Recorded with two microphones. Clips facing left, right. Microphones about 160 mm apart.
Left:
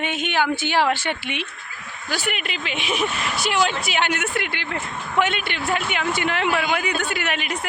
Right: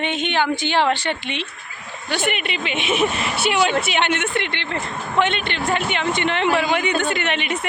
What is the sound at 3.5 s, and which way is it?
Speech, 65° right (ahead or behind).